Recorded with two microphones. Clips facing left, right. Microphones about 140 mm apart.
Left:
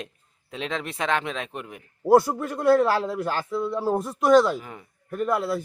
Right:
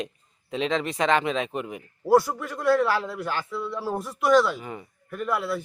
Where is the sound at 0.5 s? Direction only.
Centre (ahead or behind).